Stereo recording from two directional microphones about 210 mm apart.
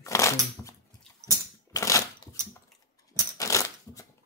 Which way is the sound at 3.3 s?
15° left (ahead or behind).